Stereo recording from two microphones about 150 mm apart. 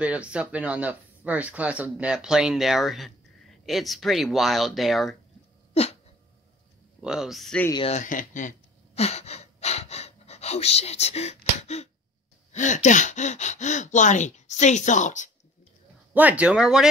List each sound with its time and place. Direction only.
0.0 s speech: 10° right (ahead or behind)
5.7 s a sound: 45° left (ahead or behind)
7.0 s speech: 5° right (ahead or behind)
7.9 s speech: 60° left (ahead or behind)
16.1 s speech: 10° right (ahead or behind)